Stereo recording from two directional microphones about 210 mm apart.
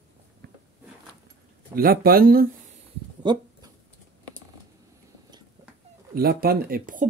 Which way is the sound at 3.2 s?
20° right (ahead or behind).